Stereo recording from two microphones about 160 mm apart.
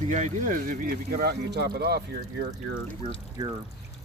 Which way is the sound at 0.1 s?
50° right (ahead or behind).